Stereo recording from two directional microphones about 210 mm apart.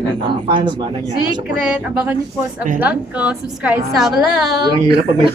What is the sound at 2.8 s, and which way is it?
A woman's voice, 5° right (ahead or behind).